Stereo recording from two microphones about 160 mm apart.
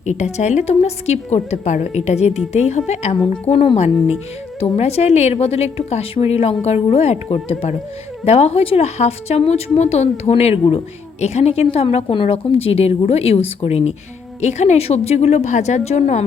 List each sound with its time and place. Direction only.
0.0 s a woman's voice: 45° left (ahead or behind)